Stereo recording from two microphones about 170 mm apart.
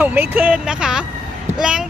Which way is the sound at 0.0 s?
10° right (ahead or behind).